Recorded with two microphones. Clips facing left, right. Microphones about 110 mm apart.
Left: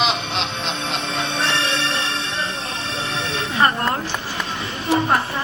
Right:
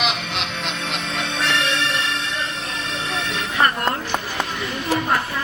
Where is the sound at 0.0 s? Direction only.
30° left (ahead or behind).